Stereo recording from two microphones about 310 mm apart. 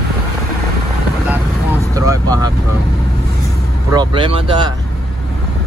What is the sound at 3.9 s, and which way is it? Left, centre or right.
Speech, centre.